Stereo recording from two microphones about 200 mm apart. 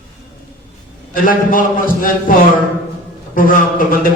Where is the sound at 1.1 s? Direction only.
45° left (ahead or behind).